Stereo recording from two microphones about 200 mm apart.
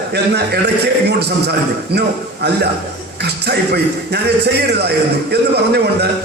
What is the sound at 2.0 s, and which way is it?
A man's voice, 55° right (ahead or behind).